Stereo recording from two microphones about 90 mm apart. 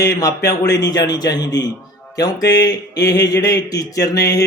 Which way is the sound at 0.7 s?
45° left (ahead or behind).